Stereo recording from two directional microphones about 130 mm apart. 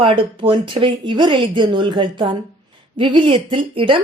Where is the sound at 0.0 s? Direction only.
40° right (ahead or behind).